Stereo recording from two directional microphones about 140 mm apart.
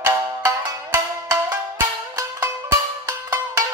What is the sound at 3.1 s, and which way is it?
Music, 15° right (ahead or behind).